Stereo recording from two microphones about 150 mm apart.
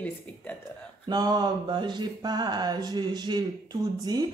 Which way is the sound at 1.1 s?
25° right (ahead or behind).